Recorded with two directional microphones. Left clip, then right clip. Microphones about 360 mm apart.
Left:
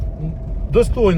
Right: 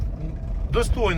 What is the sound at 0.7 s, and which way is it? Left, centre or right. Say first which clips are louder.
Speech: left 8 dB; centre.